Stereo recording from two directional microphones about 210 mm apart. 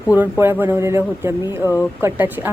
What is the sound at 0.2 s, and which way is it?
A woman's voice, 10° right (ahead or behind).